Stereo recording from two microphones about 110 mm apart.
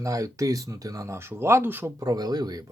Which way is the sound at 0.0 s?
30° right (ahead or behind).